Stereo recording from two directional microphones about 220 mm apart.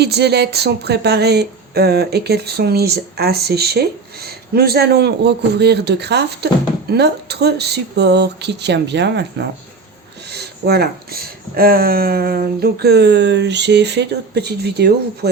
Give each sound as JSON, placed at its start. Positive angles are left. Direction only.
{"t": 0.0, "sound": "a woman's voice", "side_deg": -50}
{"t": 10.3, "sound": "a woman's voice", "side_deg": -45}